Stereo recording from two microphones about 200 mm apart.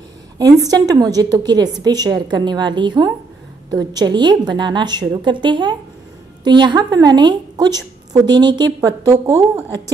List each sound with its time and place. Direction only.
0.7 s a woman's voice: 20° right (ahead or behind)